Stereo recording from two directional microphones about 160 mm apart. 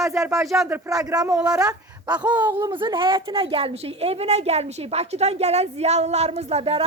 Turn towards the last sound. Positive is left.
turn(degrees=-40)  # may be behind; listen again after turning